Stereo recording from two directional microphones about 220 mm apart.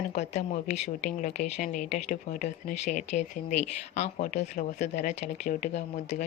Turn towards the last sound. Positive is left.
turn(degrees=30)  # may be behind; listen again after turning